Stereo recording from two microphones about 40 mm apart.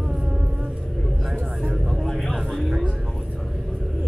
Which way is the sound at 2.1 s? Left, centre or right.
Centre.